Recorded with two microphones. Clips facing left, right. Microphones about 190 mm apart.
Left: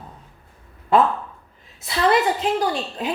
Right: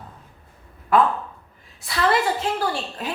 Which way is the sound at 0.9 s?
25° left (ahead or behind).